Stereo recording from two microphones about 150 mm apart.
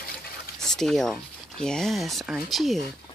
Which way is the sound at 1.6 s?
5° left (ahead or behind).